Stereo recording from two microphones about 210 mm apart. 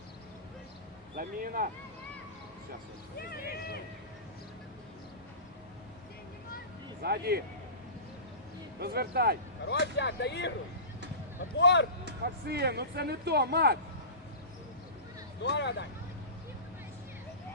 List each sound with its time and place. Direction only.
1.1 s speech: 40° right (ahead or behind)
3.2 s speech: 50° left (ahead or behind)
7.0 s speech: 50° right (ahead or behind)
8.8 s speech: 50° right (ahead or behind)
9.6 s speech: 55° left (ahead or behind)
11.5 s speech: 55° left (ahead or behind)
12.0 s speech: 50° right (ahead or behind)
15.4 s speech: 55° left (ahead or behind)